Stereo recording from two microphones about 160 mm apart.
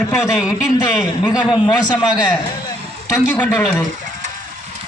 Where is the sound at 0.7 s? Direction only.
25° left (ahead or behind).